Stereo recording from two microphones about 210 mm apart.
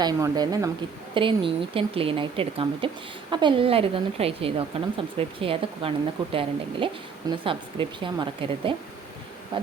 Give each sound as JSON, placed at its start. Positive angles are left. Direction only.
{"t": 0.0, "sound": "a woman's voice", "side_deg": -20}